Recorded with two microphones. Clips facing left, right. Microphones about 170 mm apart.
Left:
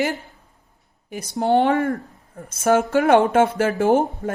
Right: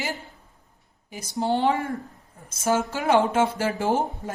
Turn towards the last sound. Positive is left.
turn(degrees=60)  # may be behind; listen again after turning